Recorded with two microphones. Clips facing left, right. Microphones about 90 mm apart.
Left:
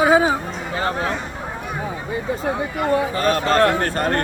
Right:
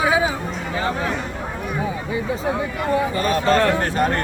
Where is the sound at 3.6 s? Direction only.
45° left (ahead or behind).